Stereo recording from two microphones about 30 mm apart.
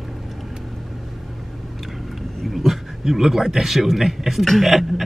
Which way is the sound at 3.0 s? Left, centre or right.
Centre.